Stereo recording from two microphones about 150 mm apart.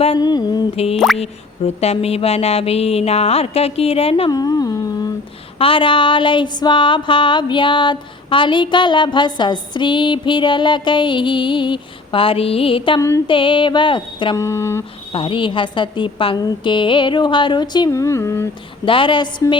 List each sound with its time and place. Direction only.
0.2 s speech: 25° left (ahead or behind)
0.9 s drip: centre (ahead or behind)
1.2 s speech: 45° left (ahead or behind)
4.3 s humming: 25° left (ahead or behind)
5.5 s music: 35° left (ahead or behind)
13.0 s speech: 20° left (ahead or behind)
13.2 s music: 35° left (ahead or behind)
14.3 s speech: 20° left (ahead or behind)
15.1 s music: 35° left (ahead or behind); by 18.4 s 20° left (ahead or behind)
18.9 s music: 35° left (ahead or behind)